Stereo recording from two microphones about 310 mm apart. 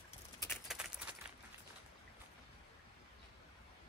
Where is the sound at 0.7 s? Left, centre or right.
Centre.